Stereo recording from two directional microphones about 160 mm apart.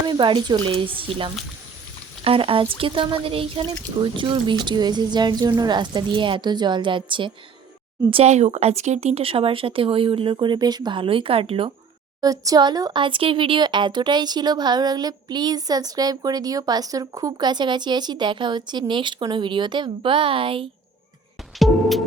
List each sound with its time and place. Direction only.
0.1 s speech: 30° right (ahead or behind)
8.1 s speech: 45° right (ahead or behind)
12.2 s speech: 20° right (ahead or behind)
21.6 s music: centre (ahead or behind)